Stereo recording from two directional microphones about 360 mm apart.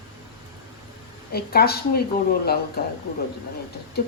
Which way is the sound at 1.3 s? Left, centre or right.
Left.